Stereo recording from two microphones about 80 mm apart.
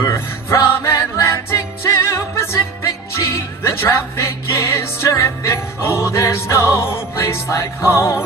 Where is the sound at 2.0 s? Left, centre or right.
Left.